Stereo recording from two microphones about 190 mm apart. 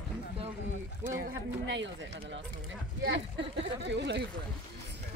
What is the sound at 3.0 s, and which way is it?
Speech, 65° right (ahead or behind).